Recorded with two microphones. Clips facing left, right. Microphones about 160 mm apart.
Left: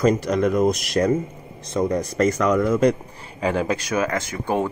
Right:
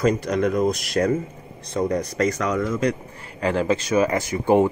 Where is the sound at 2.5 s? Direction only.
60° left (ahead or behind).